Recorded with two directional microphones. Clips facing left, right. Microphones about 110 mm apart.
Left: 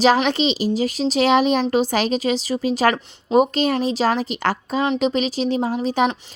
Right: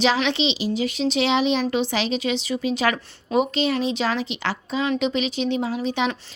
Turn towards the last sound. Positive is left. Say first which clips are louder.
# left 4 dB
turn(degrees=40)  # may be behind; listen again after turning